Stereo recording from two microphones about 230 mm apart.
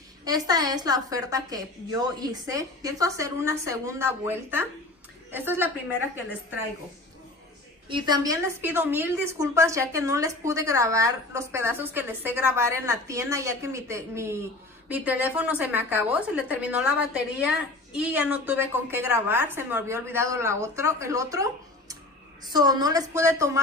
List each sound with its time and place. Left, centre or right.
0.2 s a woman's voice: centre
7.9 s a woman's voice: centre